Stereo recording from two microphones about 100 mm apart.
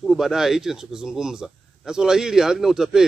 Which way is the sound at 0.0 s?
Centre (ahead or behind).